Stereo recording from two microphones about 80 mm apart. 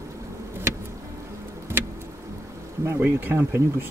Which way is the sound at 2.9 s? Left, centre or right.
Right.